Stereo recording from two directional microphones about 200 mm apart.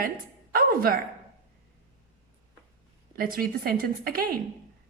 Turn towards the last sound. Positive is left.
turn(degrees=-45)  # may be behind; listen again after turning